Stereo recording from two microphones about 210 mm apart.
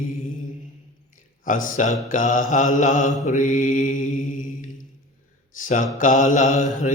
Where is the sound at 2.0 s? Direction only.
40° left (ahead or behind).